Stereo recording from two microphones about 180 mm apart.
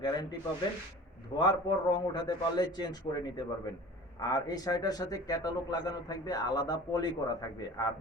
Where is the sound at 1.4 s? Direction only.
25° left (ahead or behind).